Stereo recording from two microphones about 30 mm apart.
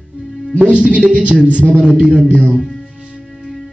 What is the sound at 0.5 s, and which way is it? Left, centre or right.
A man's voice, right.